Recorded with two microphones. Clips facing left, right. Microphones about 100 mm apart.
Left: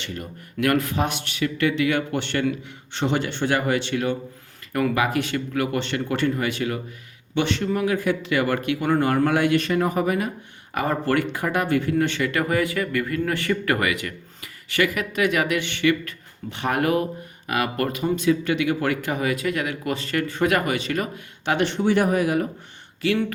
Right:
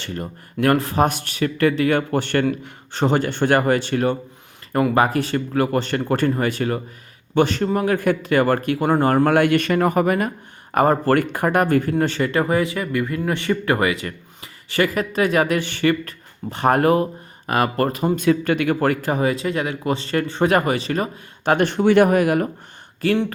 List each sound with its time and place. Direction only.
0.0 s speech: 35° right (ahead or behind)
18.3 s speech: 50° right (ahead or behind); by 21.5 s 35° right (ahead or behind)
21.5 s speech: 45° right (ahead or behind)
21.8 s speech: 65° right (ahead or behind)
23.0 s speech: 45° right (ahead or behind)